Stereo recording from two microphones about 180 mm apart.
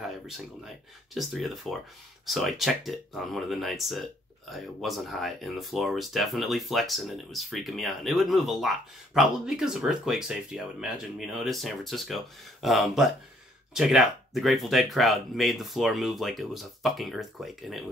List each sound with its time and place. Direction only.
0.7 s speech: centre (ahead or behind)